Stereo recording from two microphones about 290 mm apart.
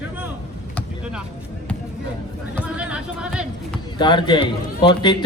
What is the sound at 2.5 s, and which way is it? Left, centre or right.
Chatter, centre.